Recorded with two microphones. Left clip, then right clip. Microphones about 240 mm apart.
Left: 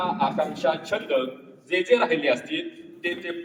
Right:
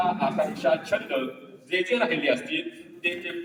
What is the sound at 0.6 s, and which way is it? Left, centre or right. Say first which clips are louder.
Speech: right 1 dB; left.